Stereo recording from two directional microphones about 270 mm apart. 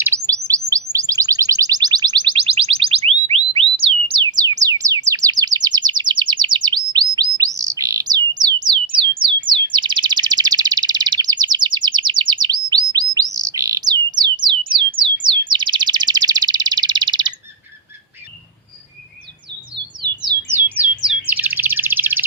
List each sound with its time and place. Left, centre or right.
0.0 s chirp: centre
0.9 s a sound: centre
4.8 s chirp: centre
7.2 s bird: centre
19.5 s bird: right
20.2 s bird: centre